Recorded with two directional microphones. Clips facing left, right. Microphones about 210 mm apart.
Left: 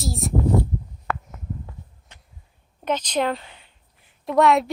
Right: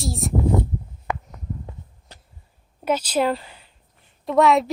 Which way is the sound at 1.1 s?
15° right (ahead or behind).